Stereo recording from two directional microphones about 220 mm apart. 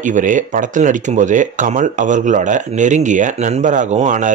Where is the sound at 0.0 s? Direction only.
35° right (ahead or behind).